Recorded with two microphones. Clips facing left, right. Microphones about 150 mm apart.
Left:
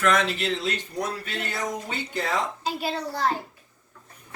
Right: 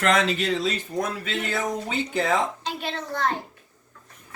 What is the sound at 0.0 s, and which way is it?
Speech, 90° right.